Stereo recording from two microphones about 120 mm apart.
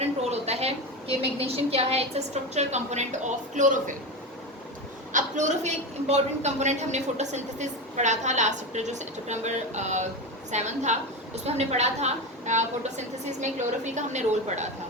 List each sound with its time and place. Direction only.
0.0 s a woman's voice: 60° right (ahead or behind); by 3.9 s 90° right
5.1 s a woman's voice: 80° right